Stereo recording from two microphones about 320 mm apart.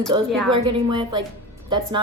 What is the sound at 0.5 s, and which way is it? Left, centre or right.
A woman's voice, centre.